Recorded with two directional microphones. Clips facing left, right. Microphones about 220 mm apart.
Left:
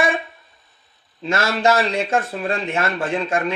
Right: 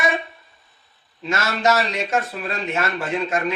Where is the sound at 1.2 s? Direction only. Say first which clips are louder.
Left 2 dB; 30° left (ahead or behind).